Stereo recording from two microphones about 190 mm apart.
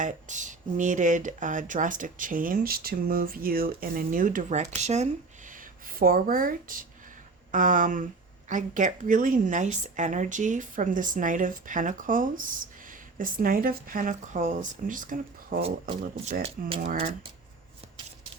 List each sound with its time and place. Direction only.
0.0 s a woman's voice: 40° right (ahead or behind)
5.5 s a woman's voice: 45° right (ahead or behind)
16.2 s speech: 35° right (ahead or behind)